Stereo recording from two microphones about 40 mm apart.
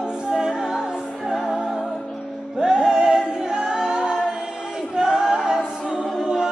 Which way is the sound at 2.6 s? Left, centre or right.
Centre.